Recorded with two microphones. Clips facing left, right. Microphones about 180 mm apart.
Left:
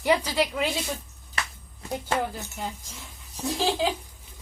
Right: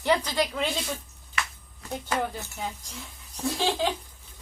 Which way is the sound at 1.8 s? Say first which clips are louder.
Left 2 dB; 25° left (ahead or behind).